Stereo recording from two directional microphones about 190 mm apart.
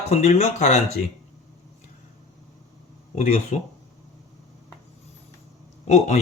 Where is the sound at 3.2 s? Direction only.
40° left (ahead or behind).